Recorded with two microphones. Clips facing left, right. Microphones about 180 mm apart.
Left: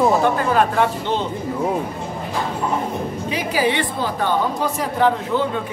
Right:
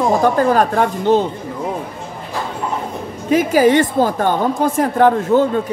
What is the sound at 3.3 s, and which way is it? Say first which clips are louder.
A woman's voice: right 9 dB; 45° right (ahead or behind).